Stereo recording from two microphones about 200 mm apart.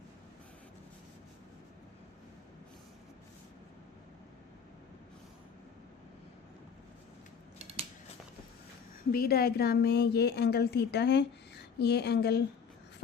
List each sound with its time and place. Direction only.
9.1 s a woman's voice: 50° left (ahead or behind)